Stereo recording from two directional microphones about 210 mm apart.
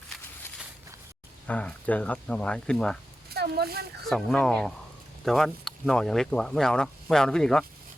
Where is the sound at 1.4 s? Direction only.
5° left (ahead or behind).